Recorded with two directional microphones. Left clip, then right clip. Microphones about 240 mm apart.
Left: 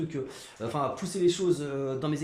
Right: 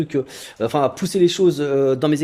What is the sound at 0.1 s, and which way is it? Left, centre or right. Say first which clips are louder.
Speech: right 13 dB; right.